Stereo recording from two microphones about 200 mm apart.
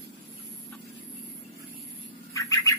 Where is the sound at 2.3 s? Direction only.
15° left (ahead or behind).